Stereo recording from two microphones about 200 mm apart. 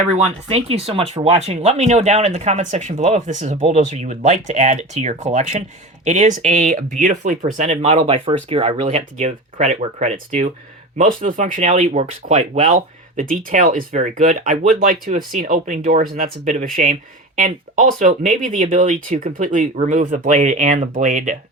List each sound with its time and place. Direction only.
0.4 s speech: 30° right (ahead or behind)